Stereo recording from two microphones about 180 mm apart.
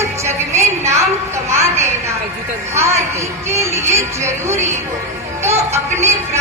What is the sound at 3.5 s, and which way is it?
Music, 15° right (ahead or behind).